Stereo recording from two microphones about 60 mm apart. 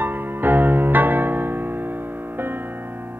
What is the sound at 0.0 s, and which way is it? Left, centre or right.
Music, right.